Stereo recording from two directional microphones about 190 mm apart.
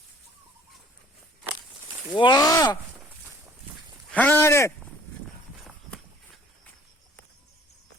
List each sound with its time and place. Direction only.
2.1 s speech: 25° left (ahead or behind)
4.1 s speech: 10° left (ahead or behind)
5.6 s run: centre (ahead or behind)